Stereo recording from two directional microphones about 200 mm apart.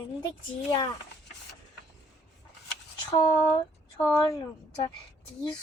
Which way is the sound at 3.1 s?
15° left (ahead or behind).